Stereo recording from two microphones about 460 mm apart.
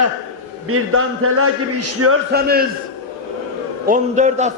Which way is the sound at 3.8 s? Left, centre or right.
Centre.